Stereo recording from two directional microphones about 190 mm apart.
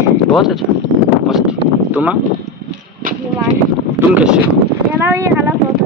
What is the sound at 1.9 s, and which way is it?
Speech, 5° right (ahead or behind).